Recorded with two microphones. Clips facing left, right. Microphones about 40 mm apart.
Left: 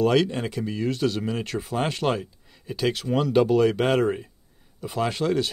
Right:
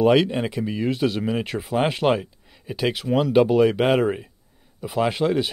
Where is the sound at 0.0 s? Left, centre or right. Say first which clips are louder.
Right 3 dB; centre.